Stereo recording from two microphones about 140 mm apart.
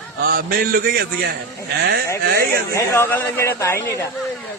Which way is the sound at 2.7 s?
20° left (ahead or behind).